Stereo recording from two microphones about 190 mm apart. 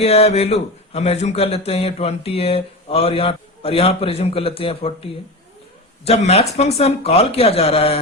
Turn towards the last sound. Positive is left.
turn(degrees=30)  # may be behind; listen again after turning